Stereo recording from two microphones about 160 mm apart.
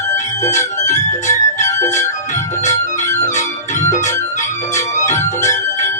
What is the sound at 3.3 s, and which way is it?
Music, 50° left (ahead or behind).